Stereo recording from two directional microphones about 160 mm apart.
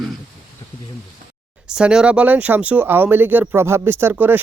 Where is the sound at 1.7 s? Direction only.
5° right (ahead or behind).